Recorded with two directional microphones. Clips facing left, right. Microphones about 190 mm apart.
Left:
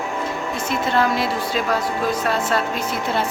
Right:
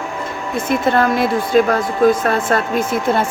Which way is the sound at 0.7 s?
50° right (ahead or behind).